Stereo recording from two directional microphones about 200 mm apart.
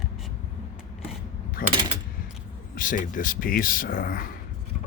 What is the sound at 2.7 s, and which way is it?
Speech, 40° left (ahead or behind).